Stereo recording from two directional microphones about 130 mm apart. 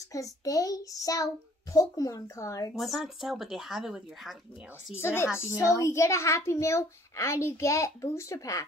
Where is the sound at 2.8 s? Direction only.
Centre (ahead or behind).